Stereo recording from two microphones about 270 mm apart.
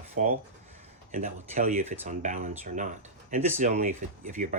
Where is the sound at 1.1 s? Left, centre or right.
Right.